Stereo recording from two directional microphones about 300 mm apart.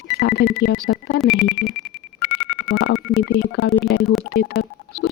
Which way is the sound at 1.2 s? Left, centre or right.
Centre.